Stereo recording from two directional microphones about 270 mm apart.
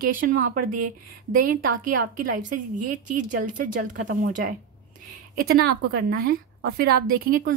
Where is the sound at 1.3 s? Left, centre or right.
Right.